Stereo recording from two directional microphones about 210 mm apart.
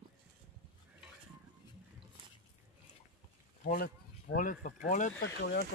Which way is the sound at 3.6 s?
45° left (ahead or behind).